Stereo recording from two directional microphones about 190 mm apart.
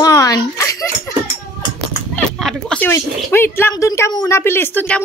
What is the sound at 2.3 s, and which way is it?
Speech, 5° left (ahead or behind).